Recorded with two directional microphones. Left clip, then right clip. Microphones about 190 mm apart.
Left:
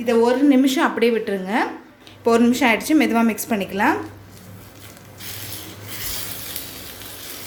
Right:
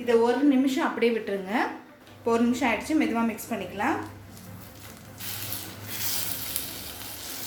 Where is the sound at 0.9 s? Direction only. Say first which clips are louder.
Left 6 dB; 30° left (ahead or behind).